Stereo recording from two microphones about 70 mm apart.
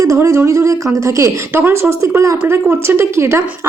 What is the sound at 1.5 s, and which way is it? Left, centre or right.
Speech, right.